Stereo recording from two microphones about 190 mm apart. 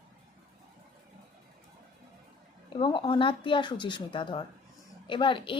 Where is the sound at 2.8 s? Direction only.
25° left (ahead or behind).